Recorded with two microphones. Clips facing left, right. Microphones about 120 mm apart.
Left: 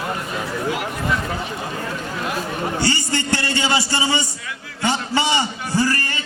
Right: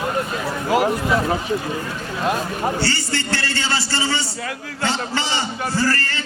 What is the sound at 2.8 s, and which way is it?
A man's voice, 15° left (ahead or behind).